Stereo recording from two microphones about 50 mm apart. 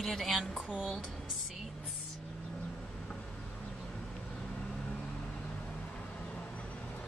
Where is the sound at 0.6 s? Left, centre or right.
Centre.